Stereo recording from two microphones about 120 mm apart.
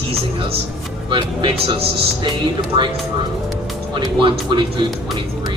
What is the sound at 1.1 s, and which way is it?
Speech, 40° right (ahead or behind).